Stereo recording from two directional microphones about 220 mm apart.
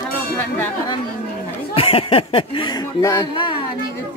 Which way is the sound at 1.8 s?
25° left (ahead or behind).